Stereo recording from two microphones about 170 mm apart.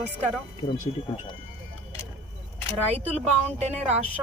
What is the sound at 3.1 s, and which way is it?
Speech, 40° right (ahead or behind).